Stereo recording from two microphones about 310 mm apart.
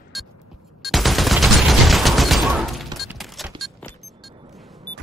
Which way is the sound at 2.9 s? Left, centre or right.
Centre.